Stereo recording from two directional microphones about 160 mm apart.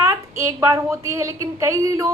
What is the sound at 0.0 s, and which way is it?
A woman's voice, 20° right (ahead or behind).